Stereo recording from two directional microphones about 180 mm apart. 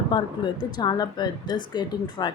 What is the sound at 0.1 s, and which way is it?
Speech, 25° left (ahead or behind).